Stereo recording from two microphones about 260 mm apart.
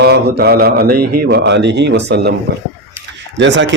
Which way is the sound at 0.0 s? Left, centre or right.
Right.